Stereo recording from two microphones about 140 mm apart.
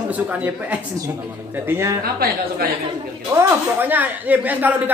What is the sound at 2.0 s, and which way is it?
Speech, 90° right.